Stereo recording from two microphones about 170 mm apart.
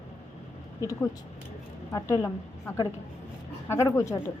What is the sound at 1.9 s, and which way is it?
Speech, 15° left (ahead or behind).